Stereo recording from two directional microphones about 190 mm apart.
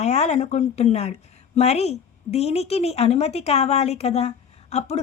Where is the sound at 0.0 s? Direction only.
35° left (ahead or behind).